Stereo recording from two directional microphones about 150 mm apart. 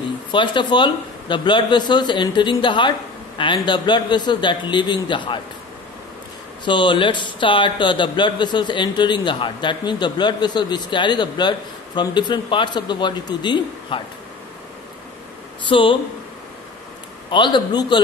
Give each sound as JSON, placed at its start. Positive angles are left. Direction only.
{"t": 0.3, "sound": "speech", "side_deg": 30}
{"t": 6.6, "sound": "speech", "side_deg": 30}
{"t": 15.7, "sound": "speech", "side_deg": 35}
{"t": 17.3, "sound": "speech", "side_deg": 30}